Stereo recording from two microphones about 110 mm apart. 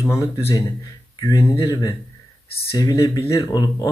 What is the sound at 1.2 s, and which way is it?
Speech, 35° left (ahead or behind).